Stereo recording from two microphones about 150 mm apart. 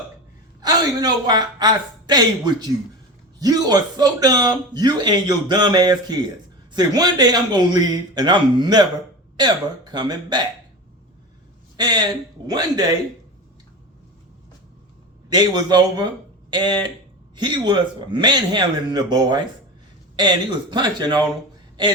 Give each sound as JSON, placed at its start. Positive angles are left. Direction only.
{"t": 0.6, "sound": "speech", "side_deg": -25}
{"t": 11.8, "sound": "speech", "side_deg": -30}
{"t": 15.3, "sound": "speech", "side_deg": -25}